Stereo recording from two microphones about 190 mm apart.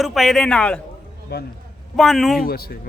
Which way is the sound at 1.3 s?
60° left (ahead or behind).